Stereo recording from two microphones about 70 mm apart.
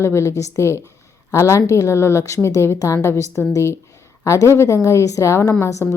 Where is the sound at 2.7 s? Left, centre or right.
Left.